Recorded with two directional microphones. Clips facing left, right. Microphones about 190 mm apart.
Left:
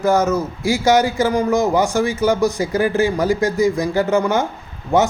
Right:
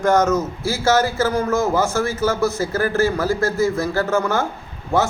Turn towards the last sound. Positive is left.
turn(degrees=20)  # may be behind; listen again after turning